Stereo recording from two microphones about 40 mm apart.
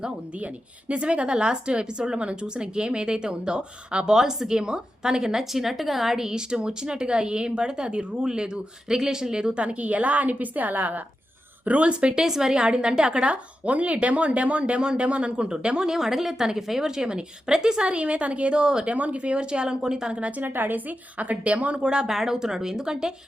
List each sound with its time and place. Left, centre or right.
0.3 s a woman's voice: right
11.6 s a woman's voice: right
15.9 s a woman's voice: centre
18.9 s a woman's voice: right
20.4 s a woman's voice: right
21.8 s speech: right